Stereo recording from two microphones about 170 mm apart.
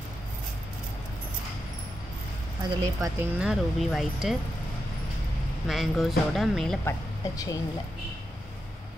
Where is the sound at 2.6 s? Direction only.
20° right (ahead or behind).